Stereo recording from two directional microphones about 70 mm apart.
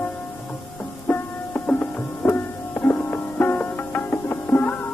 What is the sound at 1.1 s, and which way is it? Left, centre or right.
Music, left.